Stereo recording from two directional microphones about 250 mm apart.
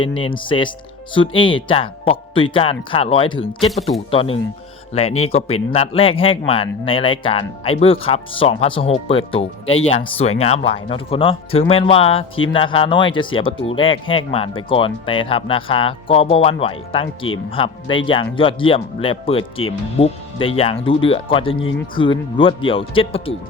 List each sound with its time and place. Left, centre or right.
0.2 s speech: centre